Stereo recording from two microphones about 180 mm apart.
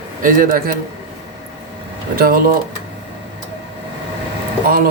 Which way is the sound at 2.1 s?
55° right (ahead or behind).